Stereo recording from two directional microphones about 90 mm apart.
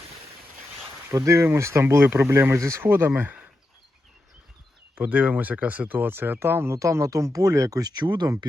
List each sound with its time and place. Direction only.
1.1 s speech: 35° right (ahead or behind)
3.2 s a sound: 20° right (ahead or behind)
4.9 s speech: 15° right (ahead or behind); by 8.3 s 55° right (ahead or behind)